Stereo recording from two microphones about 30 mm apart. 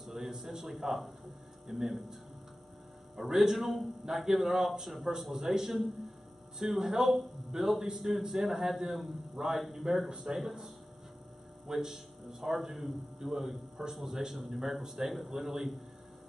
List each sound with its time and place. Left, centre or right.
0.4 s a man's voice: centre
3.3 s a man's voice: centre
5.3 s a man's voice: centre
10.0 s a man's voice: right
10.3 s a man's voice: centre
14.3 s speech: centre
14.8 s a man's voice: centre